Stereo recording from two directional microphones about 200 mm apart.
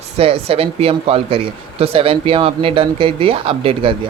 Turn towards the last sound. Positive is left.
turn(degrees=-25)  # may be behind; listen again after turning